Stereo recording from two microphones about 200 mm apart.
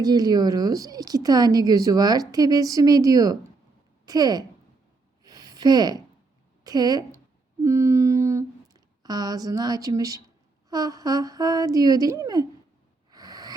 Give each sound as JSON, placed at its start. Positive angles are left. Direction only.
{"t": 0.0, "sound": "a woman's voice", "side_deg": -20}
{"t": 5.2, "sound": "a sound", "side_deg": -20}
{"t": 6.7, "sound": "a woman's voice", "side_deg": -20}
{"t": 13.1, "sound": "snort", "side_deg": -20}